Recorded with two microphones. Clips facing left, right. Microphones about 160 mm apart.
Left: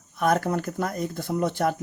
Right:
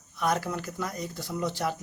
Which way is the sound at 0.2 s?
50° left (ahead or behind).